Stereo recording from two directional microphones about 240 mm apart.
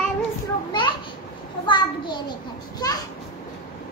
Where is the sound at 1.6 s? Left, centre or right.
Centre.